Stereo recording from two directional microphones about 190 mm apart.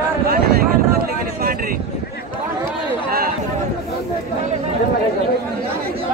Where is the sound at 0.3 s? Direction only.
55° right (ahead or behind).